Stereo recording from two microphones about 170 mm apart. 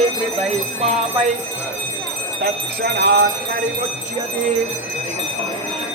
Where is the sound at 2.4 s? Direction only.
75° right (ahead or behind).